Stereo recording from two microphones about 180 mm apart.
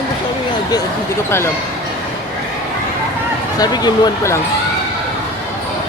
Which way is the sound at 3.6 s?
25° left (ahead or behind).